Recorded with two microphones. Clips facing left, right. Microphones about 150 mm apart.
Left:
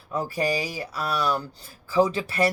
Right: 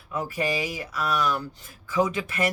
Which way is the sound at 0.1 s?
35° left (ahead or behind).